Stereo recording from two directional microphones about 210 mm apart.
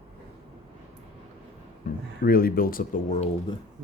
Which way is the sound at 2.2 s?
45° left (ahead or behind).